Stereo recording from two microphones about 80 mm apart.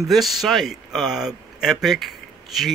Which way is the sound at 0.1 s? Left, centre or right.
Centre.